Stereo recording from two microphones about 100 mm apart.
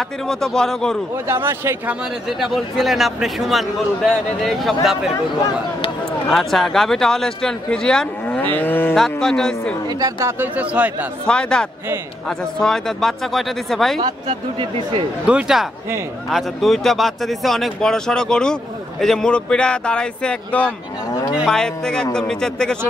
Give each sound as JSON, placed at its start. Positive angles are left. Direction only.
{"t": 0.3, "sound": "speech", "side_deg": 5}
{"t": 1.2, "sound": "a man's voice", "side_deg": -25}
{"t": 2.4, "sound": "speech", "side_deg": 0}
{"t": 6.3, "sound": "speech", "side_deg": 5}
{"t": 8.3, "sound": "livestock", "side_deg": 20}
{"t": 8.9, "sound": "speech", "side_deg": 0}
{"t": 9.8, "sound": "speech", "side_deg": -40}
{"t": 10.4, "sound": "speech", "side_deg": -15}
{"t": 11.2, "sound": "a man's voice", "side_deg": 10}
{"t": 15.2, "sound": "a man's voice", "side_deg": -10}